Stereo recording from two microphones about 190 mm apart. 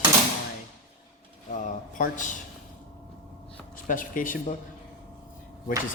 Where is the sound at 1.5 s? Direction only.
45° left (ahead or behind).